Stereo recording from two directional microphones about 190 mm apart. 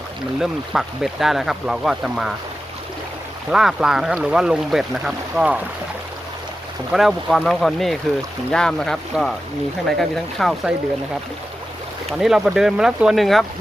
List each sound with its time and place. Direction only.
0.3 s speech: centre (ahead or behind)
3.5 s speech: centre (ahead or behind)
6.9 s speech: centre (ahead or behind)
12.2 s speech: centre (ahead or behind)